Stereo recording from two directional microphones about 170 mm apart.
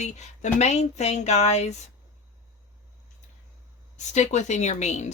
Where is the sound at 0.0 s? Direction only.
40° left (ahead or behind).